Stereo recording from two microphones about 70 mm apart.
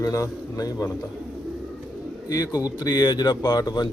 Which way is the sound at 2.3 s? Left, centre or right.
Left.